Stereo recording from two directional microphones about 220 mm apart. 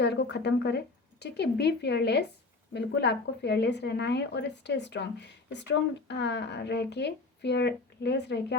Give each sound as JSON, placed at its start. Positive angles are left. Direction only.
{"t": 0.0, "sound": "a woman's voice", "side_deg": 50}